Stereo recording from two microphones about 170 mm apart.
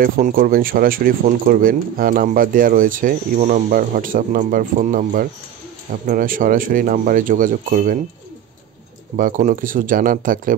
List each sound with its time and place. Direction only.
0.0 s speech: 55° right (ahead or behind)
9.1 s speech: 50° right (ahead or behind)